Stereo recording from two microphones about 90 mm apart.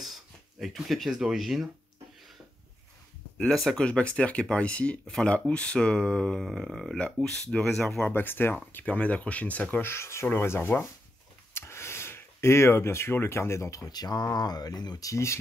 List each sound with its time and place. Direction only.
0.0 s speech: centre (ahead or behind)
3.3 s speech: 5° left (ahead or behind)
8.1 s speech: 25° left (ahead or behind)